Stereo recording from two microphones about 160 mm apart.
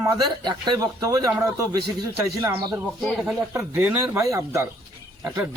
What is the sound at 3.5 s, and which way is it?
A man's voice, 15° right (ahead or behind).